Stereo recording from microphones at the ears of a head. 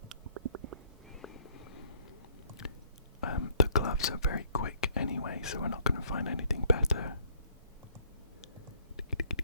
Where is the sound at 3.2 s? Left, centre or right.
Left.